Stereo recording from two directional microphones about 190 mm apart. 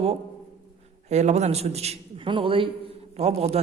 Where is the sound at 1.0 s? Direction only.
35° right (ahead or behind).